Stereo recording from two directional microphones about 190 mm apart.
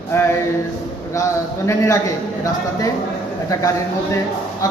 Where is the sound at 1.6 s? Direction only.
15° left (ahead or behind).